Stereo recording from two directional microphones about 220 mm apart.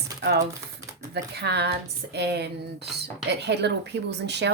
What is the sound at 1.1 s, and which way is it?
Speech, 50° right (ahead or behind).